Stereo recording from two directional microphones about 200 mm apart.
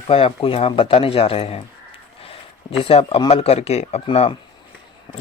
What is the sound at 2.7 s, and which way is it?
Speech, 30° left (ahead or behind).